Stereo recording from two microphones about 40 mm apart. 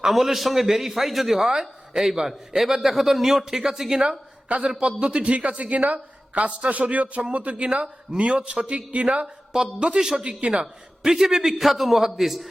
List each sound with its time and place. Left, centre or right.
0.1 s a man's voice: centre
4.0 s a sound: right
4.8 s a man's voice: right
9.2 s speech: centre
10.2 s a man's voice: right
10.6 s a man's voice: centre